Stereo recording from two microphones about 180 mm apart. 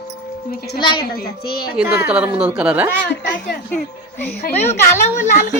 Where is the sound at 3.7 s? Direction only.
10° left (ahead or behind).